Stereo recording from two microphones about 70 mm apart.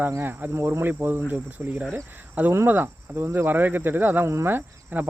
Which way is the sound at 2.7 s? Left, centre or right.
Right.